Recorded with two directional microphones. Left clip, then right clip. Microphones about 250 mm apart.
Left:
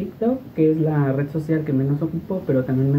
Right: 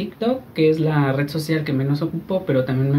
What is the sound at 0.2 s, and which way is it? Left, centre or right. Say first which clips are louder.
Speech: right 1 dB; centre.